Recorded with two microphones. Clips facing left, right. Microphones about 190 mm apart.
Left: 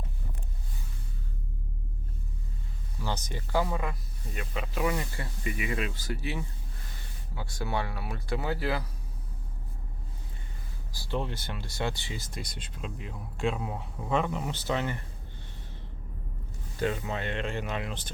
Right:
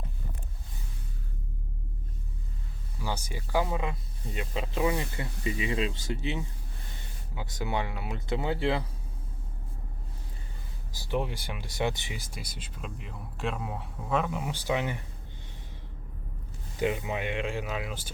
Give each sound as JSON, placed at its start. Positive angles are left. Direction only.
{"t": 3.0, "sound": "speech", "side_deg": -10}
{"t": 10.9, "sound": "speech", "side_deg": -15}
{"t": 16.8, "sound": "speech", "side_deg": -15}